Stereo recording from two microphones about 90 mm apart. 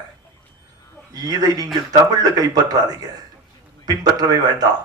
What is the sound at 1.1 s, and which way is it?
A man's voice, 45° right (ahead or behind).